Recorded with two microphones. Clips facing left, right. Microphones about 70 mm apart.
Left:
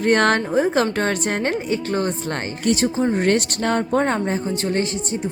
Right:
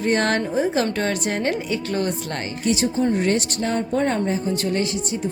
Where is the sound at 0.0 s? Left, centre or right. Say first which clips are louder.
Left 3 dB; left.